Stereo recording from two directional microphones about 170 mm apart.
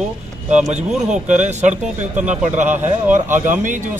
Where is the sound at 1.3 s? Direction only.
45° right (ahead or behind).